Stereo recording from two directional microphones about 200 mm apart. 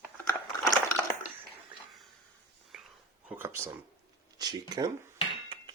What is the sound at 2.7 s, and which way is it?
Whispering, 5° right (ahead or behind).